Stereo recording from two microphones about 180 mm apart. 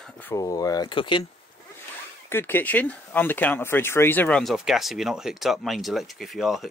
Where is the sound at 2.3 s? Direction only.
10° left (ahead or behind).